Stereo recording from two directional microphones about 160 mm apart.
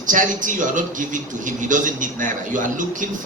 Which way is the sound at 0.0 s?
55° right (ahead or behind).